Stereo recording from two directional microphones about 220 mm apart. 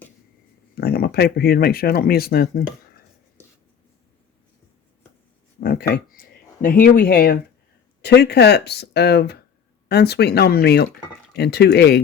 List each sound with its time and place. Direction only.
0.8 s speech: 45° left (ahead or behind)
5.5 s a sound: 45° left (ahead or behind)
6.8 s speech: 40° left (ahead or behind)